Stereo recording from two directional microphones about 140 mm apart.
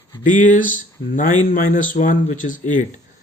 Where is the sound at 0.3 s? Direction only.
70° left (ahead or behind).